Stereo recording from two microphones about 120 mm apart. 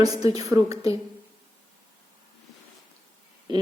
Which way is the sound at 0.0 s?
30° right (ahead or behind).